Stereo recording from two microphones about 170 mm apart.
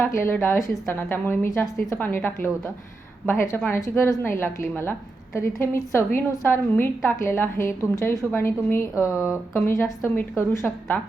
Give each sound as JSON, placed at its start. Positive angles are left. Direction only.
{"t": 0.0, "sound": "a woman's voice", "side_deg": 15}
{"t": 9.1, "sound": "speech", "side_deg": -5}
{"t": 9.6, "sound": "a woman's voice", "side_deg": 15}